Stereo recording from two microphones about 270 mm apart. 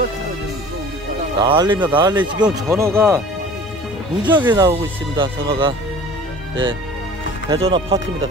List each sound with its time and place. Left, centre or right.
1.4 s speech: centre
4.3 s speech: centre
7.4 s speech: centre